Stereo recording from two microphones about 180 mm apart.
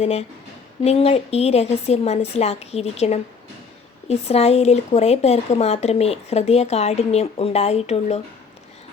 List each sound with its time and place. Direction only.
0.0 s speech: 35° left (ahead or behind)